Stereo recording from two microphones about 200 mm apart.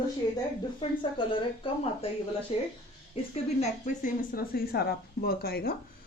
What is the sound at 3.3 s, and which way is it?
A woman's voice, 35° left (ahead or behind).